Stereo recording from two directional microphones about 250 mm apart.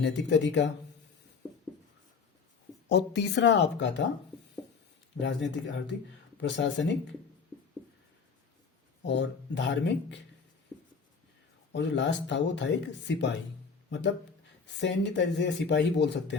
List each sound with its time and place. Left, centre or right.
0.0 s speech: left
2.9 s speech: left
5.2 s speech: left
9.0 s speech: left
11.7 s speech: left
14.8 s speech: left